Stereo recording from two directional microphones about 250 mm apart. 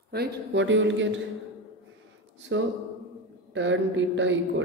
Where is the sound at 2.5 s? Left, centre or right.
Right.